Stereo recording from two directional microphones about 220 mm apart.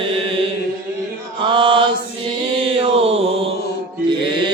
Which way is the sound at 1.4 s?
25° right (ahead or behind).